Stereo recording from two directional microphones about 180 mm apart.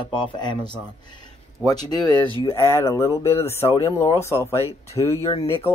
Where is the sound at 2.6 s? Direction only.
15° left (ahead or behind).